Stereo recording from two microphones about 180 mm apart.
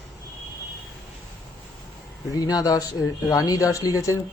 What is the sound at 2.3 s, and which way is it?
Speech, 20° left (ahead or behind).